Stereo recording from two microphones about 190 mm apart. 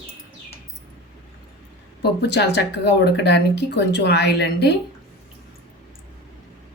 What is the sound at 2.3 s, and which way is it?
Speech, 60° left (ahead or behind).